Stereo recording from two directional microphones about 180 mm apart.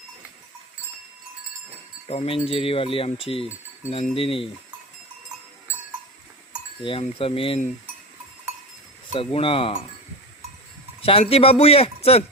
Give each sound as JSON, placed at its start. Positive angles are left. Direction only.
{"t": 2.0, "sound": "speech", "side_deg": 35}
{"t": 7.0, "sound": "speech", "side_deg": 30}
{"t": 9.1, "sound": "speech", "side_deg": 30}
{"t": 11.0, "sound": "speech", "side_deg": 30}